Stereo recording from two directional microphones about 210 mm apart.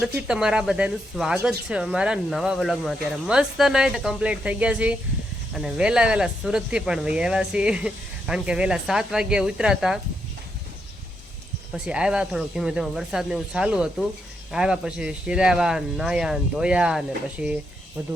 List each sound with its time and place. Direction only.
0.1 s speech: 5° right (ahead or behind)
11.7 s speech: 5° right (ahead or behind)